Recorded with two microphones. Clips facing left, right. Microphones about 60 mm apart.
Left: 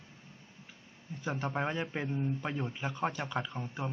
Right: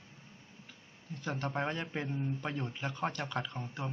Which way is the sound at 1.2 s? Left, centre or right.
Centre.